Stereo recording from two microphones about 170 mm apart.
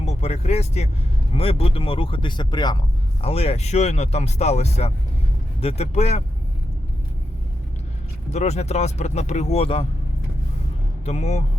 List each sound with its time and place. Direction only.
0.0 s speech: 40° left (ahead or behind)
8.3 s speech: 40° left (ahead or behind)
11.0 s speech: 40° left (ahead or behind)